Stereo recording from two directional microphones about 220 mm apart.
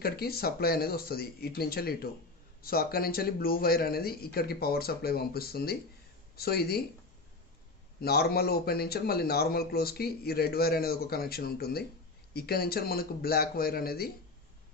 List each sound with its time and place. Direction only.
0.0 s a man's voice: 45° left (ahead or behind)
8.0 s a man's voice: 45° left (ahead or behind)